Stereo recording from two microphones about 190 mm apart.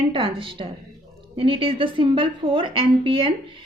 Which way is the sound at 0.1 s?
30° right (ahead or behind).